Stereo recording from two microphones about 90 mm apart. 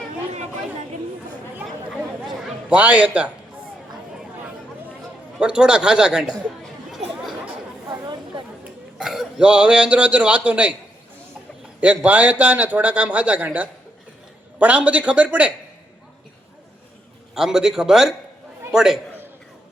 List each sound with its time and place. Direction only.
2.6 s a man's voice: 15° right (ahead or behind)
5.4 s a man's voice: 10° right (ahead or behind)
7.1 s chatter: centre (ahead or behind)
8.0 s chatter: 55° right (ahead or behind)
9.0 s a man's voice: 5° right (ahead or behind)
11.8 s a man's voice: 15° right (ahead or behind)
17.3 s a man's voice: 5° right (ahead or behind)